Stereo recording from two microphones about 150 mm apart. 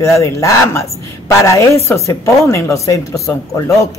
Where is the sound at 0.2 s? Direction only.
20° left (ahead or behind).